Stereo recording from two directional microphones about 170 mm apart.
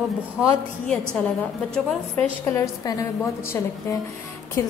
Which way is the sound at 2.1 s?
15° left (ahead or behind).